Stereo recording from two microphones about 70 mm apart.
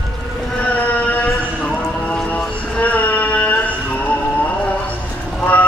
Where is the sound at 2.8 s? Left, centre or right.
Left.